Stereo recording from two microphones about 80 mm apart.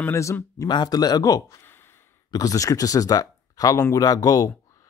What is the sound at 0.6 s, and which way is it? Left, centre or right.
Speech, left.